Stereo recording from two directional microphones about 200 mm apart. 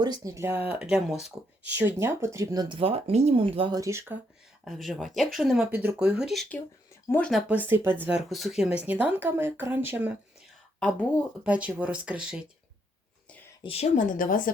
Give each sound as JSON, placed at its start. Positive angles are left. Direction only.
{"t": 0.0, "sound": "speech", "side_deg": -20}
{"t": 4.6, "sound": "speech", "side_deg": 0}
{"t": 11.4, "sound": "speech", "side_deg": -5}
{"t": 13.6, "sound": "speech", "side_deg": 30}